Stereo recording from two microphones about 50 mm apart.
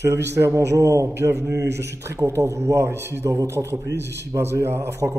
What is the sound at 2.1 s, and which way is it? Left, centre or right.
Speech, right.